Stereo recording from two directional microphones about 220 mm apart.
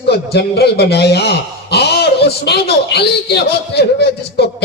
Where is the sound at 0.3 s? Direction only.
45° left (ahead or behind).